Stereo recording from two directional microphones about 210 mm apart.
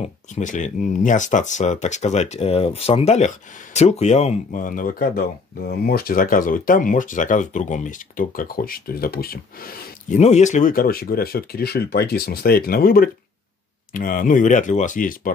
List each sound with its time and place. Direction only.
0.0 s speech: 35° left (ahead or behind)